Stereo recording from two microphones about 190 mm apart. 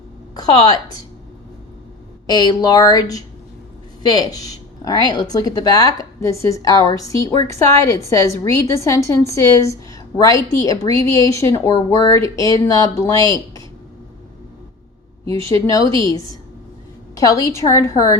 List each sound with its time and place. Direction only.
0.3 s a woman's voice: 20° left (ahead or behind)
2.2 s a woman's voice: 20° left (ahead or behind)
15.2 s a woman's voice: 15° left (ahead or behind)